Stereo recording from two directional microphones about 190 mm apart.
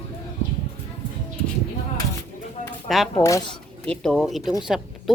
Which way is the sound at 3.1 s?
15° left (ahead or behind).